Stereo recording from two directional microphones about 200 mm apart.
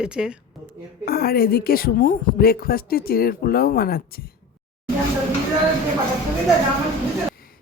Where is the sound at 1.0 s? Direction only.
50° left (ahead or behind).